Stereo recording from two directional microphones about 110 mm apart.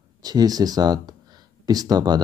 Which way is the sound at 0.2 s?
35° right (ahead or behind).